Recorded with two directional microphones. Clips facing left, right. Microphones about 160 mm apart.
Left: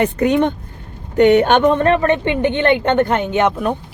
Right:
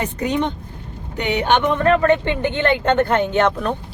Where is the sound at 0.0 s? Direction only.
55° left (ahead or behind).